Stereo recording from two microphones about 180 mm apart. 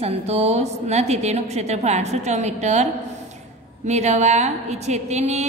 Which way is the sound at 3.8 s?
40° right (ahead or behind).